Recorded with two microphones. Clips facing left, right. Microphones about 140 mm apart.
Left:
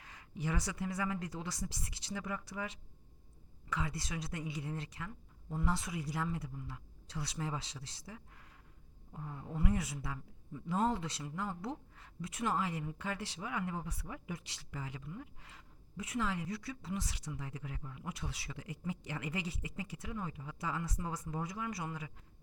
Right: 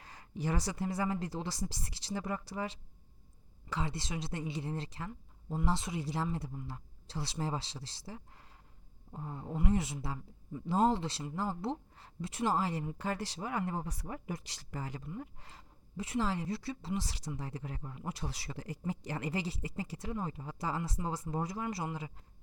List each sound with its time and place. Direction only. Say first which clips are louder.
0.0 s a woman's voice: right 3 dB; 35° right (ahead or behind)